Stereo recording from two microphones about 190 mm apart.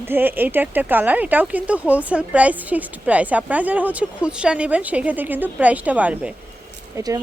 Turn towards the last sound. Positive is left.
turn(degrees=-20)  # may be behind; listen again after turning